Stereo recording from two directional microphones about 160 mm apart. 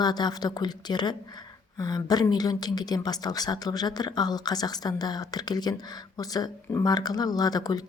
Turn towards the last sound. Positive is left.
turn(degrees=25)  # may be behind; listen again after turning